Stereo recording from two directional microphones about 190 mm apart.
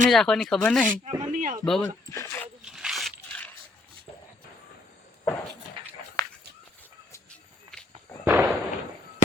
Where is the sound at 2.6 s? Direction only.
Centre (ahead or behind).